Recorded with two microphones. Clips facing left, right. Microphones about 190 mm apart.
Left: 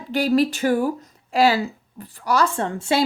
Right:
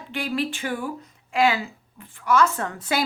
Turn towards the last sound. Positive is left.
turn(degrees=30)  # may be behind; listen again after turning